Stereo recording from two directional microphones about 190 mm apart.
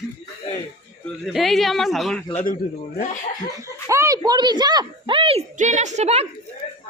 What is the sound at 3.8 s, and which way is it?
A woman's voice, 15° right (ahead or behind).